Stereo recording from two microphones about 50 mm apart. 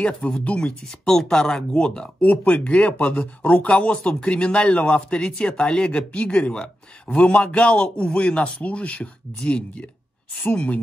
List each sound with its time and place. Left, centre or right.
0.0 s speech: left
0.8 s speech: centre
2.2 s speech: left
3.6 s speech: left